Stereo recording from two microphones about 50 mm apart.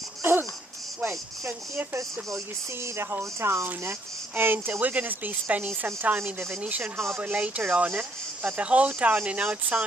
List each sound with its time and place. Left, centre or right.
0.2 s babbling: right
1.0 s speech: right
2.8 s speech: right
4.4 s speech: right